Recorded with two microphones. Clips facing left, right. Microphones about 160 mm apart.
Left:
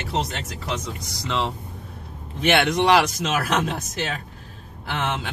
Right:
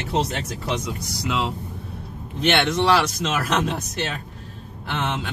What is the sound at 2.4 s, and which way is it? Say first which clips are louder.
Speech: left 1 dB; 5° left (ahead or behind).